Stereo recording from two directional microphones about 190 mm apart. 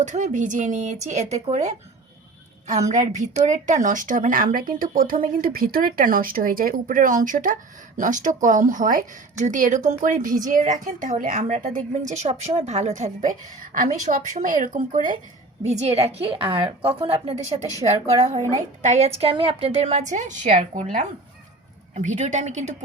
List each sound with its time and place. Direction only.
0.0 s a woman's voice: 40° right (ahead or behind)
2.9 s a woman's voice: 40° right (ahead or behind)
21.9 s a woman's voice: 40° right (ahead or behind)